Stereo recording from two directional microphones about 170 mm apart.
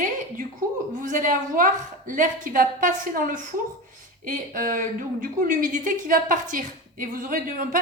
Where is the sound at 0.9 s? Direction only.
50° right (ahead or behind).